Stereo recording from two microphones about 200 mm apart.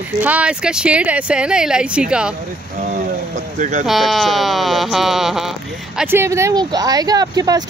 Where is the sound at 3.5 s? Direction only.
40° right (ahead or behind).